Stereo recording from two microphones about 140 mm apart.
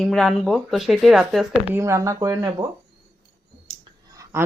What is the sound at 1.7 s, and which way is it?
Speech, 20° right (ahead or behind).